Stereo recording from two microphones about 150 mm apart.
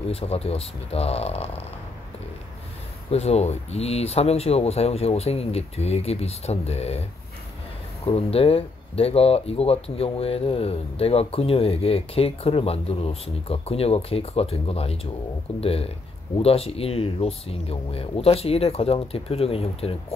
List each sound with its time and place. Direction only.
0.1 s speech: 40° left (ahead or behind)
3.1 s speech: 45° left (ahead or behind)
8.0 s speech: 40° left (ahead or behind)